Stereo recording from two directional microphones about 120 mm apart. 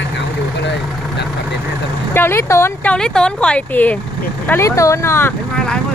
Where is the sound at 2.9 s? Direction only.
5° left (ahead or behind); by 5.3 s 20° left (ahead or behind).